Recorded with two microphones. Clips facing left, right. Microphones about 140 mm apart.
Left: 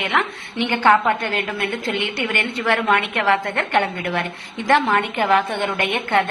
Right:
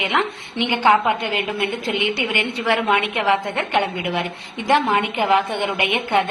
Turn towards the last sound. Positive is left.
turn(degrees=-15)  # may be behind; listen again after turning